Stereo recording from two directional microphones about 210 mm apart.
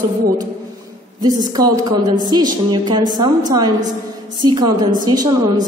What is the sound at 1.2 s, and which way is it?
A woman's voice, 20° right (ahead or behind).